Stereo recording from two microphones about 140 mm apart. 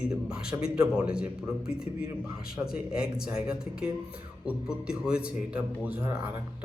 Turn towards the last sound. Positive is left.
turn(degrees=-10)  # may be behind; listen again after turning